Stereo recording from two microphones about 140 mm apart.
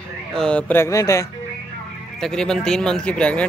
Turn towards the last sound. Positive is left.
turn(degrees=10)  # may be behind; listen again after turning